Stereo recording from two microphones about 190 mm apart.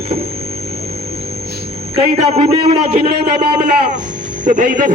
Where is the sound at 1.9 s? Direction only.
30° right (ahead or behind).